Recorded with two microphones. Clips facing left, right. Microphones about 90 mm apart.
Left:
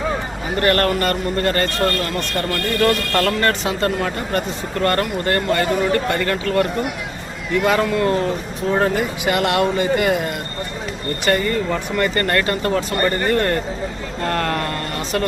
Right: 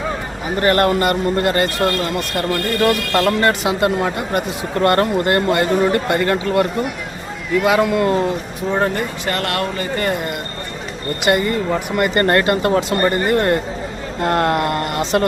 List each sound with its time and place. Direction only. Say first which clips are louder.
0.6 s speech: right 3 dB; 15° right (ahead or behind)
4.8 s speech: right 4 dB; 30° right (ahead or behind)
7.5 s a man's voice: right 2 dB; 5° right (ahead or behind)
7.8 s speech: right 2 dB; 20° right (ahead or behind)
8.7 s a man's voice: left 1 dB; centre (ahead or behind)
11.3 s speech: right 2 dB; 20° right (ahead or behind)
12.2 s speech: right 4 dB; 30° right (ahead or behind)